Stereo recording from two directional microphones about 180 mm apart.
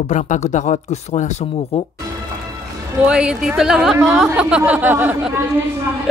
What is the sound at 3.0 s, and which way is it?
A man's voice, 5° right (ahead or behind).